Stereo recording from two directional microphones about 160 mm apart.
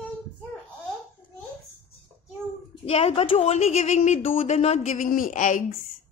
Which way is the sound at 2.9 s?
40° left (ahead or behind).